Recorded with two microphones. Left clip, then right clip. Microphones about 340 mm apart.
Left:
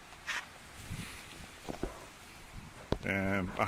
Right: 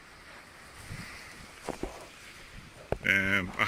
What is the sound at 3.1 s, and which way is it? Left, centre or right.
Speech, centre.